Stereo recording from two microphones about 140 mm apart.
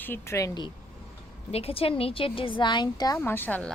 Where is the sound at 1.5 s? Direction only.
45° left (ahead or behind); by 3.2 s 25° left (ahead or behind).